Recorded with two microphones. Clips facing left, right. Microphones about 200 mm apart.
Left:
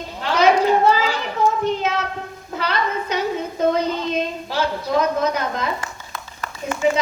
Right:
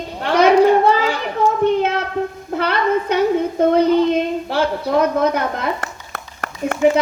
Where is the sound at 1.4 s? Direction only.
60° right (ahead or behind).